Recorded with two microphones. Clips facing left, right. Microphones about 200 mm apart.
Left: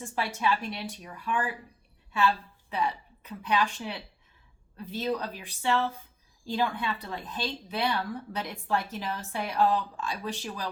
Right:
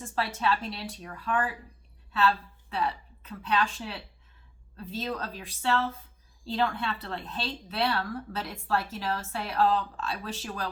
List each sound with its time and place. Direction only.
0.0 s a woman's voice: 15° left (ahead or behind)
2.6 s a woman's voice: 15° left (ahead or behind)